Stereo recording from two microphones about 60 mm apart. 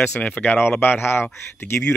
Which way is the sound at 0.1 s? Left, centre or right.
Left.